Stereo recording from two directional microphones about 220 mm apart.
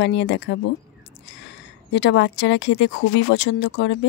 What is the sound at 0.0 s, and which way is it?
A woman's voice, 55° left (ahead or behind).